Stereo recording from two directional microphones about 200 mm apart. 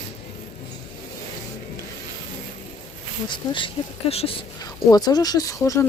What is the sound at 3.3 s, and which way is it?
Speech, 25° left (ahead or behind).